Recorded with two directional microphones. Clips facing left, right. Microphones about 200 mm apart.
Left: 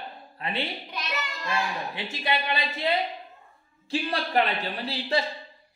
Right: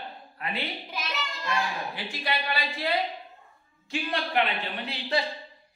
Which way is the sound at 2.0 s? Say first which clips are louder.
Left 5 dB; 25° left (ahead or behind).